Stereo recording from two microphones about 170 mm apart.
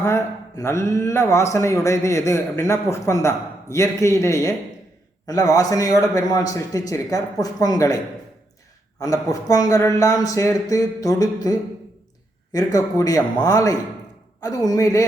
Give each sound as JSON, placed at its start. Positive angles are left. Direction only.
{"t": 0.0, "sound": "a man's voice", "side_deg": 15}
{"t": 9.0, "sound": "a man's voice", "side_deg": 20}
{"t": 12.5, "sound": "a man's voice", "side_deg": 20}